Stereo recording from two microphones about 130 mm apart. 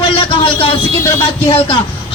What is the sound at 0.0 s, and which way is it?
Vehicle, 40° left (ahead or behind).